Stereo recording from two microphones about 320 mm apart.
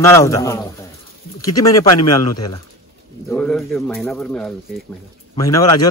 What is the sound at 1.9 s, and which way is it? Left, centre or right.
Speech, left.